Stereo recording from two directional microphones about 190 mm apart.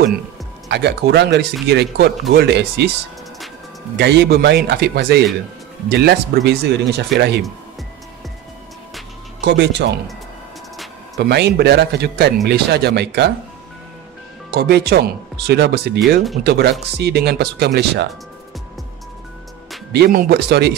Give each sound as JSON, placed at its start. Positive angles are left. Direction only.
{"t": 0.7, "sound": "speech", "side_deg": -65}
{"t": 3.9, "sound": "speech", "side_deg": -60}
{"t": 9.4, "sound": "speech", "side_deg": -60}
{"t": 11.1, "sound": "speech", "side_deg": -60}
{"t": 14.5, "sound": "speech", "side_deg": -55}
{"t": 19.9, "sound": "speech", "side_deg": -55}